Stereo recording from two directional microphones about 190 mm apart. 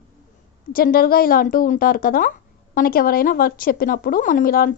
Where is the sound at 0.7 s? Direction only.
50° left (ahead or behind).